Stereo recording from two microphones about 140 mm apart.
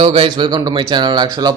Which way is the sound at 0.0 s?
40° right (ahead or behind).